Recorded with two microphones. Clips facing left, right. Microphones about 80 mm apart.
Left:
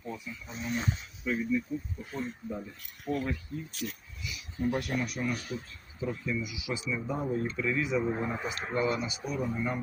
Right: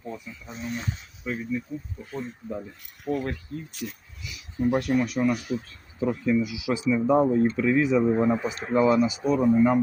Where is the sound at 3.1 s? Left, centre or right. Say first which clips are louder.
Right 4 dB; right.